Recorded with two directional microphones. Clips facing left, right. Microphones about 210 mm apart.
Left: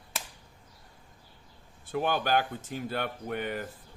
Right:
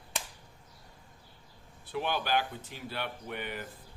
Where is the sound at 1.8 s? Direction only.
45° left (ahead or behind).